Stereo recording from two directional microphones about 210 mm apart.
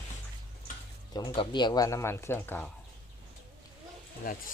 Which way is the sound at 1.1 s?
15° left (ahead or behind).